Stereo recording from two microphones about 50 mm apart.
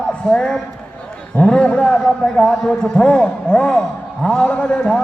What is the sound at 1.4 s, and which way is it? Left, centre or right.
A man's voice, centre.